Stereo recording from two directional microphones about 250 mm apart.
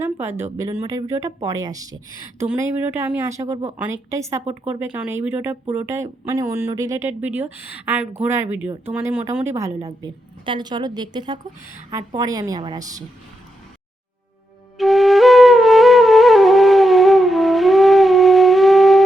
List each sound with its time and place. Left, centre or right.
0.0 s a sound: centre
0.7 s speech: centre
4.4 s speech: right
4.9 s speech: centre
14.8 s flute: centre